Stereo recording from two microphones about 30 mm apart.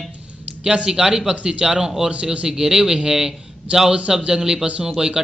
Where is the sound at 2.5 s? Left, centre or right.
Right.